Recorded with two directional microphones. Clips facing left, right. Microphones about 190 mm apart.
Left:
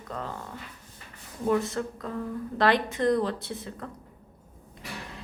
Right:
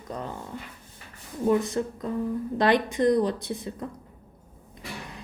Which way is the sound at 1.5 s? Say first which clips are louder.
Right 1 dB; 15° right (ahead or behind).